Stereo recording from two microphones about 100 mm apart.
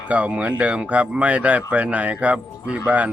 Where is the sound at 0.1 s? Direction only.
15° right (ahead or behind).